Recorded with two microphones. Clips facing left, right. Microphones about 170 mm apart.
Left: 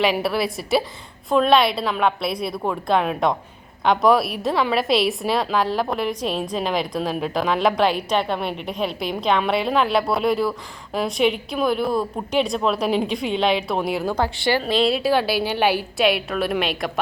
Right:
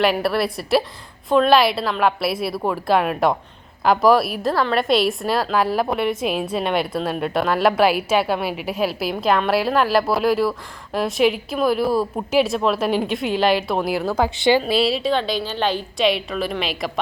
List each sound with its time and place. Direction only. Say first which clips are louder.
0.0 s a woman's voice: right 2 dB; centre (ahead or behind)
14.3 s a woman's voice: right 5 dB; 20° right (ahead or behind)
14.6 s a woman's voice: even; 5° right (ahead or behind)